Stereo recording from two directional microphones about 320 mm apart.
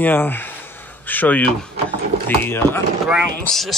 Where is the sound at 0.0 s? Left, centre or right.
Centre.